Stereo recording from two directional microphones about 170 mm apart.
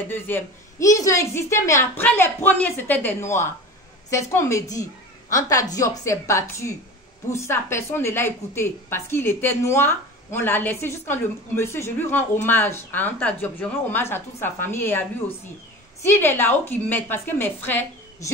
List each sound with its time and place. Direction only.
0.1 s a woman's voice: 15° left (ahead or behind)